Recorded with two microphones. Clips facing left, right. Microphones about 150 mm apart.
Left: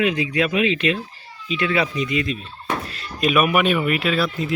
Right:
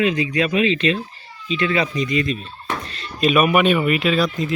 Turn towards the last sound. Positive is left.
turn(degrees=10)  # may be behind; listen again after turning